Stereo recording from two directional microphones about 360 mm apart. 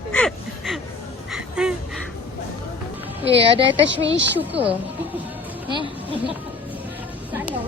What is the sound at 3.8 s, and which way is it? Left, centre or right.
Speech, right.